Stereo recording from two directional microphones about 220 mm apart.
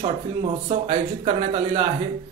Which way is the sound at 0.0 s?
30° right (ahead or behind).